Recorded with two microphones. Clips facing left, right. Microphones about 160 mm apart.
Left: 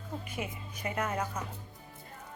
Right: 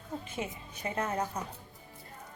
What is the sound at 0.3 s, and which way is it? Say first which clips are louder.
Speech: right 1 dB; 30° right (ahead or behind).